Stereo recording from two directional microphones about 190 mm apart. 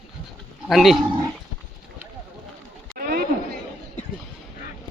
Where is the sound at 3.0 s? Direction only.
50° right (ahead or behind).